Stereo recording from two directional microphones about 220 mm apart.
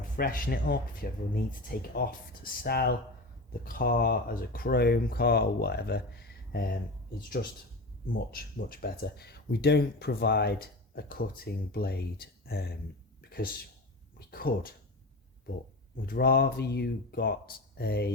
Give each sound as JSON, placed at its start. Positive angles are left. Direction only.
{"t": 0.0, "sound": "speech", "side_deg": 40}
{"t": 8.0, "sound": "speech", "side_deg": 40}
{"t": 16.0, "sound": "speech", "side_deg": 45}